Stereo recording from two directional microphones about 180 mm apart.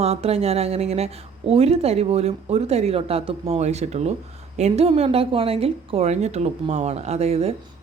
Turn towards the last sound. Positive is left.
turn(degrees=-35)  # may be behind; listen again after turning